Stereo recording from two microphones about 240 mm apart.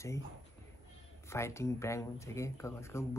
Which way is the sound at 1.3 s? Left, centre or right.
Centre.